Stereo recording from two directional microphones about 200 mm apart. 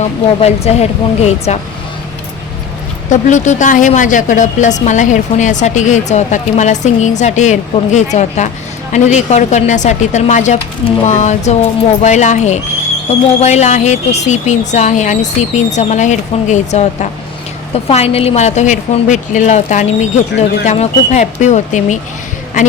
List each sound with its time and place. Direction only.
0.0 s speech: 30° left (ahead or behind)
3.1 s speech: 35° left (ahead or behind)